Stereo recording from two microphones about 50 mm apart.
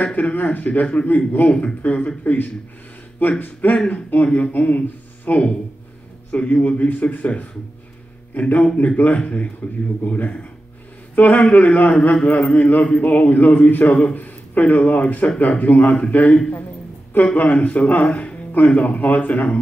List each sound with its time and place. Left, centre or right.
0.0 s speech: left
3.2 s speech: left
3.7 s speech: left
18.1 s music: left
18.7 s speech: left